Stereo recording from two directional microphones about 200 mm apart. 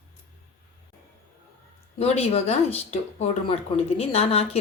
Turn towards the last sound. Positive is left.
turn(degrees=30)  # may be behind; listen again after turning